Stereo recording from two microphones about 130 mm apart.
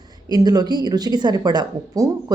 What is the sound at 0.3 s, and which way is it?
A woman's voice, 30° right (ahead or behind).